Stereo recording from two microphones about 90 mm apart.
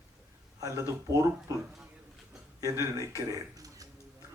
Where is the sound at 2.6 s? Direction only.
35° right (ahead or behind).